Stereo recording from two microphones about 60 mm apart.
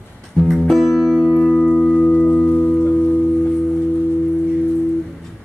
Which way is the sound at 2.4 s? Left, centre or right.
Left.